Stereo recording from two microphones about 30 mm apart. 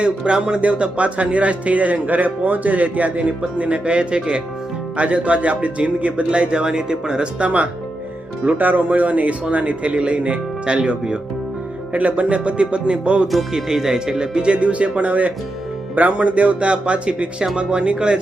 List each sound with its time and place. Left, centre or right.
0.3 s speech: right
0.6 s speech: right
3.8 s speech: right
4.9 s speech: right
7.3 s speech: right
8.5 s speech: right
8.9 s speech: right
10.8 s speech: right
11.9 s speech: right
13.6 s speech: centre
14.5 s speech: right